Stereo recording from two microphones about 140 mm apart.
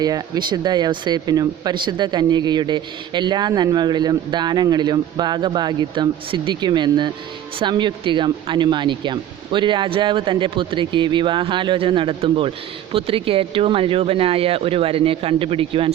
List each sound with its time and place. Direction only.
0.0 s speech: 30° right (ahead or behind)